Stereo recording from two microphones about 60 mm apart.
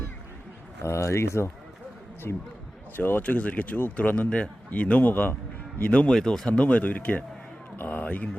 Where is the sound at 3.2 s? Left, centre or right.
Left.